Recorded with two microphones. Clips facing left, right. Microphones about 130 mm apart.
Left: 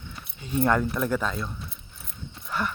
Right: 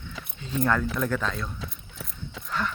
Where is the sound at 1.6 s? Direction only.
90° right.